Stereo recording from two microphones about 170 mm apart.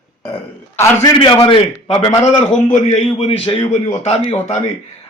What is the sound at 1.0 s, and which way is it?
A man's voice, 30° left (ahead or behind).